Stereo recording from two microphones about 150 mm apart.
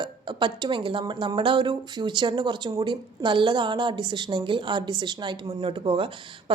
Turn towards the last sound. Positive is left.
turn(degrees=-35)  # may be behind; listen again after turning